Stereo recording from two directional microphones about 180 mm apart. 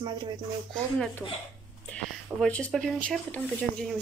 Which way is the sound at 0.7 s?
5° left (ahead or behind).